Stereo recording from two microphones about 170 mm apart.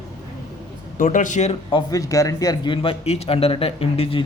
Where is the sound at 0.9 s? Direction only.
50° left (ahead or behind).